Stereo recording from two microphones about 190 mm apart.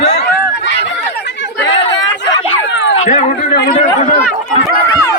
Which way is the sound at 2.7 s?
70° left (ahead or behind).